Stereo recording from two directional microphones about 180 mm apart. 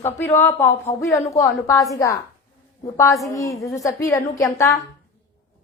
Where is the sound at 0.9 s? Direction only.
25° left (ahead or behind).